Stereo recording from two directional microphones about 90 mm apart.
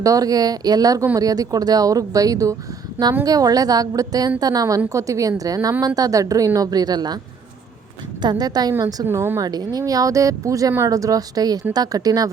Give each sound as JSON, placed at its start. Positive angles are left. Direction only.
{"t": 0.0, "sound": "a woman's voice", "side_deg": -40}
{"t": 8.2, "sound": "a woman's voice", "side_deg": -50}
{"t": 9.0, "sound": "speech", "side_deg": -25}
{"t": 9.4, "sound": "a woman's voice", "side_deg": -45}